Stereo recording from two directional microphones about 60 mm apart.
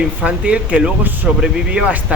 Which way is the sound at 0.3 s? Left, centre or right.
Right.